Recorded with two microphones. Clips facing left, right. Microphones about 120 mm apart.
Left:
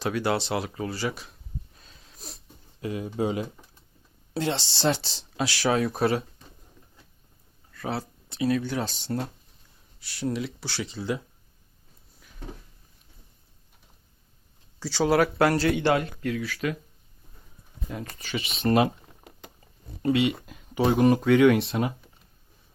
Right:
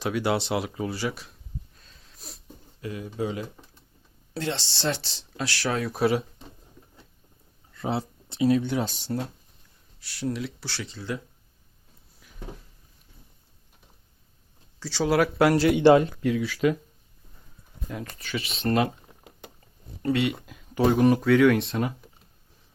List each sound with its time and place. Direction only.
0.0 s speech: 10° right (ahead or behind)
2.1 s dog: centre (ahead or behind)
2.8 s speech: 25° left (ahead or behind); by 6.2 s 5° right (ahead or behind)
7.7 s speech: 20° right (ahead or behind); by 10.8 s centre (ahead or behind)
10.9 s speech: 15° left (ahead or behind)
12.2 s a sound: 5° right (ahead or behind)
14.8 s speech: centre (ahead or behind); by 16.7 s 20° right (ahead or behind)
17.8 s speech: 5° left (ahead or behind)
20.1 s speech: centre (ahead or behind)